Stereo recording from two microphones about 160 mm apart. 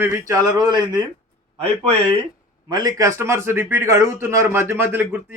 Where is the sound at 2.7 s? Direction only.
25° right (ahead or behind).